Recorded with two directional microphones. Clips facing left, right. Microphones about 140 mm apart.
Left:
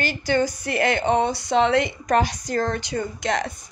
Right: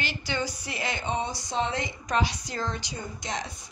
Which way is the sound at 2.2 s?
45° left (ahead or behind).